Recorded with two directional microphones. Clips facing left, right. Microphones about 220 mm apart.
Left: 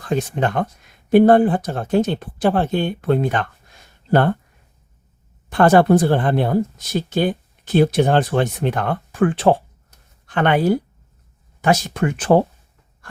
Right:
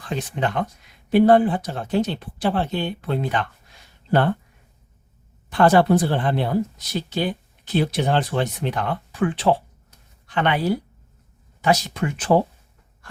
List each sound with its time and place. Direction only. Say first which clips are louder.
0.0 s speech: left 5 dB; 45° left (ahead or behind)
5.5 s speech: left 3 dB; 50° left (ahead or behind)